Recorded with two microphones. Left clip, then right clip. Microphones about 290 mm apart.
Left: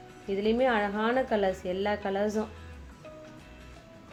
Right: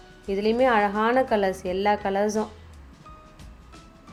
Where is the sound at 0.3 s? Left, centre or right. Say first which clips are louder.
Right 5 dB; centre.